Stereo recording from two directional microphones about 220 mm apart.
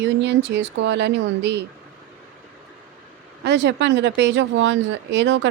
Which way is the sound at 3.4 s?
50° right (ahead or behind).